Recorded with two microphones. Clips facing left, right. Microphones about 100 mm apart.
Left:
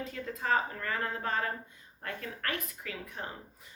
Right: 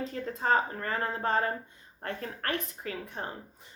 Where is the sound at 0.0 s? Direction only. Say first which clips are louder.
Right 4 dB; 35° right (ahead or behind).